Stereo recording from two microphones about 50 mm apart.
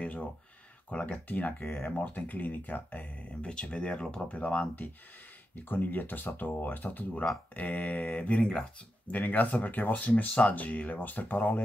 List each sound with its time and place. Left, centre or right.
0.8 s speech: left
4.3 s speech: left
9.0 s speech: left